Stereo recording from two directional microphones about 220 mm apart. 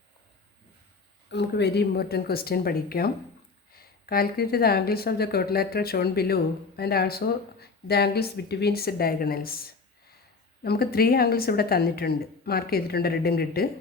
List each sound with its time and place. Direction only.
1.3 s speech: 50° left (ahead or behind)